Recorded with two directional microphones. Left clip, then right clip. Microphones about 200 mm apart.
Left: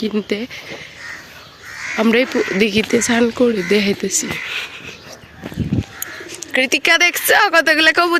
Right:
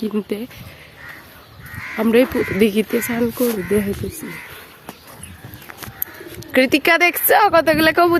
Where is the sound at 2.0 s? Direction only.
5° right (ahead or behind).